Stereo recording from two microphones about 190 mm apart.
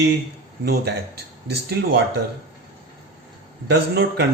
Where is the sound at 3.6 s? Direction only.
60° right (ahead or behind).